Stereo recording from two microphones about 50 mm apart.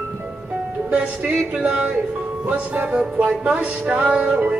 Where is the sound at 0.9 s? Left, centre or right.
Right.